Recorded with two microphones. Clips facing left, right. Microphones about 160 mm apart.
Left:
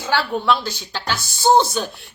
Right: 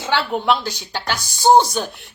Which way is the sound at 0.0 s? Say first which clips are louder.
Right 1 dB; 20° right (ahead or behind).